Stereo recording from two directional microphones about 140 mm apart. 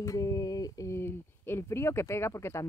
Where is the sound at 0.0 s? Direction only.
25° left (ahead or behind).